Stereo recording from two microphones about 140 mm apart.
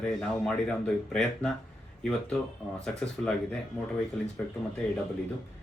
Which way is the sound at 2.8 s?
5° left (ahead or behind).